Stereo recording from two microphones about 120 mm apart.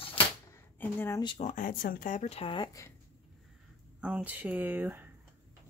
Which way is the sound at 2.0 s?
75° left (ahead or behind).